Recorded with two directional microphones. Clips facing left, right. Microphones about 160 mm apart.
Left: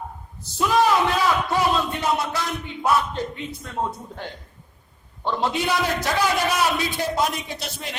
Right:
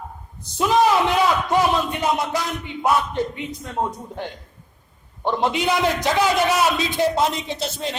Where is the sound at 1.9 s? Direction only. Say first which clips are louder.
Right 2 dB; 15° right (ahead or behind).